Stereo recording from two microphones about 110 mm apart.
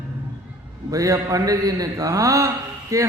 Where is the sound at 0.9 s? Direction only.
30° right (ahead or behind).